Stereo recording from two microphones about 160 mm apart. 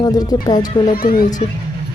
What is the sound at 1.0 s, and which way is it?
Speech, 70° left (ahead or behind).